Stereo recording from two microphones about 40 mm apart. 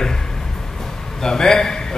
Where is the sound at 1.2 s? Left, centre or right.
Centre.